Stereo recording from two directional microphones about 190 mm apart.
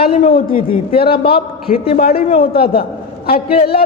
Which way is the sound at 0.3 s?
50° left (ahead or behind).